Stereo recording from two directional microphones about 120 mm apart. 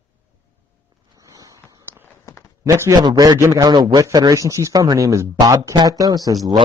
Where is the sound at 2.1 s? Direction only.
25° left (ahead or behind).